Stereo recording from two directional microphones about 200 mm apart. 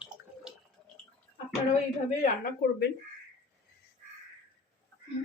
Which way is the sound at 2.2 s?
50° left (ahead or behind).